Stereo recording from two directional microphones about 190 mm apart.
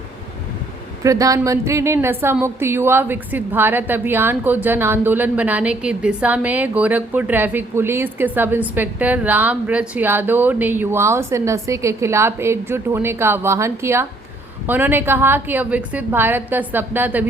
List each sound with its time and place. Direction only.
1.0 s a woman's voice: 15° right (ahead or behind)